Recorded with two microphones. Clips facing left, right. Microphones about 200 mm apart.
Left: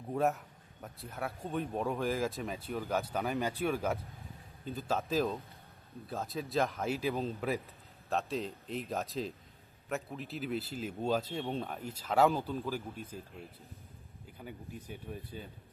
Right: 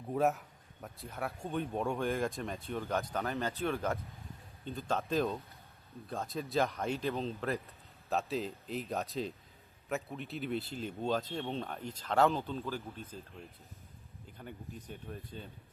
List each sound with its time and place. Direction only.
0.1 s a man's voice: centre (ahead or behind)
14.3 s speech: 5° left (ahead or behind)